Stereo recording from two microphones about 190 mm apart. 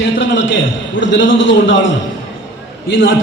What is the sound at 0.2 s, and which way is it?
A man's voice, 75° left (ahead or behind).